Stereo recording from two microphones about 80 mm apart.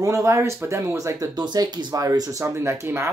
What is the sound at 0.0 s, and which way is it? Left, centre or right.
Speech, right.